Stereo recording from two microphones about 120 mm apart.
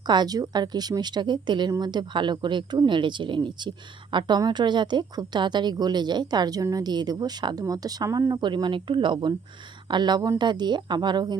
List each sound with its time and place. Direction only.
0.0 s speech: 35° right (ahead or behind)